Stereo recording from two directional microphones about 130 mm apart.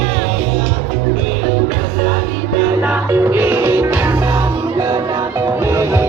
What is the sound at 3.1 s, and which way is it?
Music, 20° right (ahead or behind).